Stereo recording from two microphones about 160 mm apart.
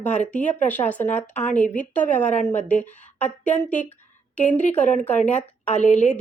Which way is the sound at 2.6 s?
10° left (ahead or behind).